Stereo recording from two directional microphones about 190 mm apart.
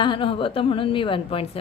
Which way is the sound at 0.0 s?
25° left (ahead or behind).